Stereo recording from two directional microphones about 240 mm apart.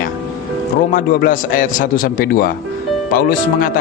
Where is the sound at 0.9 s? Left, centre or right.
Left.